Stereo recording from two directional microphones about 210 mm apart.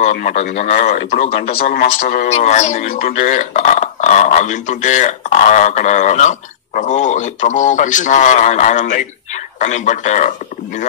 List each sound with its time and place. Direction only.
0.0 s speech: 35° left (ahead or behind)
1.5 s speech: 45° left (ahead or behind)